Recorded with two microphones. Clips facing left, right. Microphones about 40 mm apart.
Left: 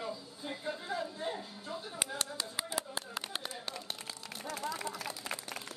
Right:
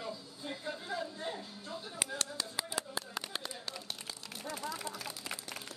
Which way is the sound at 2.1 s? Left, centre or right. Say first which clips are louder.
Even; left.